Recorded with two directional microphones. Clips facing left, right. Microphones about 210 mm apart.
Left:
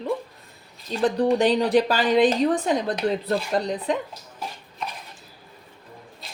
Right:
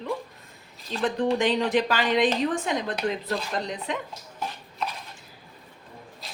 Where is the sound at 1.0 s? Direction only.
35° left (ahead or behind).